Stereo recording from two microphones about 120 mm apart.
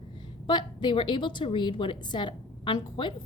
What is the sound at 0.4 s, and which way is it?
A woman's voice, 40° left (ahead or behind).